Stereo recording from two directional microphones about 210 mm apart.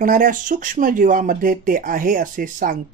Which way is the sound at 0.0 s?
40° right (ahead or behind).